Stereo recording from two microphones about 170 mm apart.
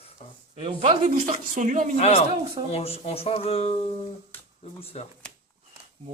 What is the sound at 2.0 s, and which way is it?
Speech, 40° left (ahead or behind).